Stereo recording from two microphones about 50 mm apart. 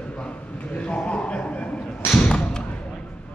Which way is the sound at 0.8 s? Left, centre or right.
Left.